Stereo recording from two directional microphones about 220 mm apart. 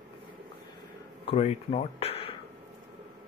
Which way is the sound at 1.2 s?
25° left (ahead or behind).